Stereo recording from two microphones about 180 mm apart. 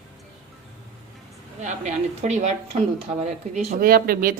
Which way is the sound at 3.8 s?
55° right (ahead or behind).